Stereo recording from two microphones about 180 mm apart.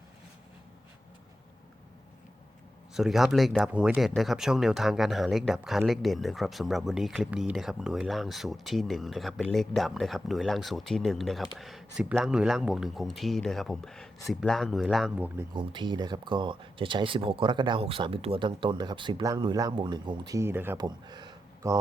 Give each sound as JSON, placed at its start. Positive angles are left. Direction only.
{"t": 2.9, "sound": "speech", "side_deg": 0}
{"t": 15.5, "sound": "speech", "side_deg": -25}
{"t": 20.7, "sound": "a sound", "side_deg": -25}